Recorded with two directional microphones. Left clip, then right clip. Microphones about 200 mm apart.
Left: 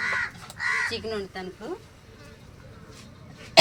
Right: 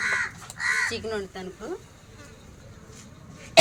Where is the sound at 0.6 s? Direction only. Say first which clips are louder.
Right 1 dB; 60° right (ahead or behind).